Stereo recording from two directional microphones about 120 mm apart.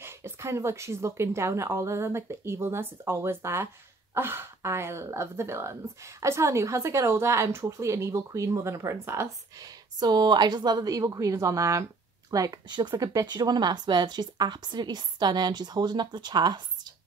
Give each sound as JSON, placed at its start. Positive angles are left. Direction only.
{"t": 0.0, "sound": "speech", "side_deg": -20}
{"t": 9.9, "sound": "a woman's voice", "side_deg": -35}